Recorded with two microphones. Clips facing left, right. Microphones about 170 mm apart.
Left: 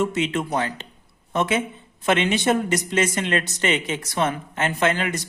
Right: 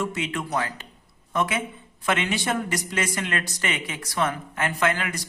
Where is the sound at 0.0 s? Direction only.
25° left (ahead or behind).